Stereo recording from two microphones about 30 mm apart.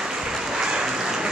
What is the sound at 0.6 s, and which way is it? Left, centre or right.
Applause, right.